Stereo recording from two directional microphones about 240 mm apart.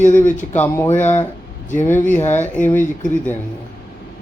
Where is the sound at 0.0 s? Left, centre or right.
Left.